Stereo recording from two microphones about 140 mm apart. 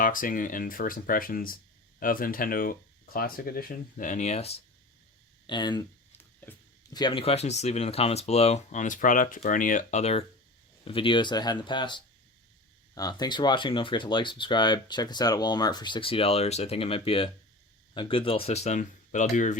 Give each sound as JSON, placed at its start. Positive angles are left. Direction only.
{"t": 0.0, "sound": "speech", "side_deg": 75}
{"t": 5.5, "sound": "speech", "side_deg": 30}
{"t": 6.9, "sound": "speech", "side_deg": 35}
{"t": 10.8, "sound": "speech", "side_deg": 40}